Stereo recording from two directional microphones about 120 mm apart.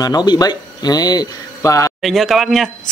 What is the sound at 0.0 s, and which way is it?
Speech, 35° left (ahead or behind).